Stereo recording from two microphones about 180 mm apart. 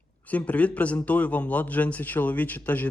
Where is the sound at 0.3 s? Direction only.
10° left (ahead or behind).